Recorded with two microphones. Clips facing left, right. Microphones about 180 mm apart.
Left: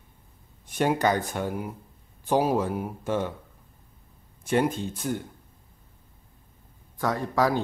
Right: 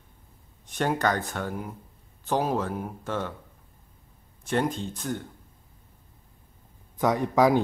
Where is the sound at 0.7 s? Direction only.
10° left (ahead or behind).